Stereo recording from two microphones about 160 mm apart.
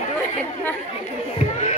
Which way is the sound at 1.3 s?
35° left (ahead or behind).